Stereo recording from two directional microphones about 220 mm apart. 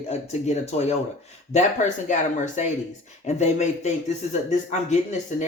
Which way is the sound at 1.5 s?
35° left (ahead or behind).